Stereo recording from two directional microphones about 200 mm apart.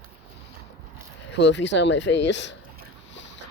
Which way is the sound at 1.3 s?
60° left (ahead or behind).